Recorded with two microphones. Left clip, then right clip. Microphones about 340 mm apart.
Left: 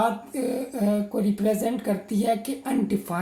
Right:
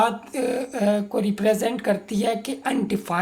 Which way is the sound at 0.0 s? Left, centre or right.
Right.